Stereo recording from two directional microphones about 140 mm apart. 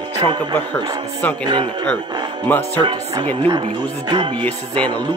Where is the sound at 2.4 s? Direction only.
15° left (ahead or behind).